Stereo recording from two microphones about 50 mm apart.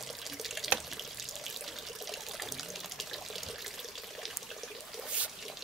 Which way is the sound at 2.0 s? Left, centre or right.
Centre.